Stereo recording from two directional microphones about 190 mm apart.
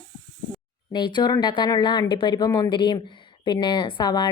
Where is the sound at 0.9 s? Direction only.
25° left (ahead or behind).